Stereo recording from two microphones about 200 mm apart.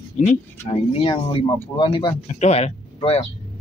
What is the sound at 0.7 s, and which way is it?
Speech, 35° left (ahead or behind).